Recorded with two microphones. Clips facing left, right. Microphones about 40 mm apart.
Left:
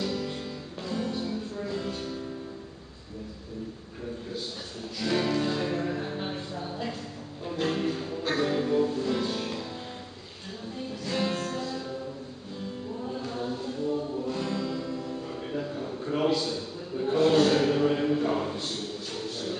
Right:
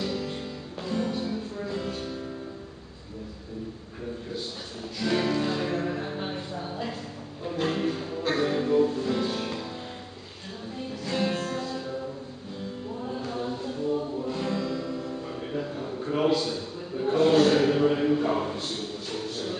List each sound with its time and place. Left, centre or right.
0.0 s music: centre
4.9 s music: centre
10.9 s music: centre
13.0 s music: centre